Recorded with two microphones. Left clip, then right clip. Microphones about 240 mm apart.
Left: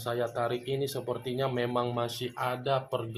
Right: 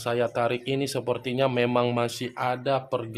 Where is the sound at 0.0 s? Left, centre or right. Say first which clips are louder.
Right 6 dB; right.